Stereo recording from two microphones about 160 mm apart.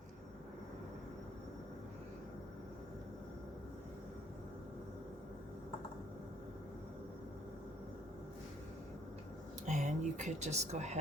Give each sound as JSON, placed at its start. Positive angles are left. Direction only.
{"t": 9.6, "sound": "speech", "side_deg": -50}